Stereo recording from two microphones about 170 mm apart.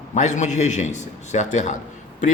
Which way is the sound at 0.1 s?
45° left (ahead or behind).